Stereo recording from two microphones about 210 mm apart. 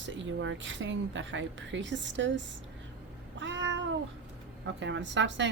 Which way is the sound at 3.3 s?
60° right (ahead or behind).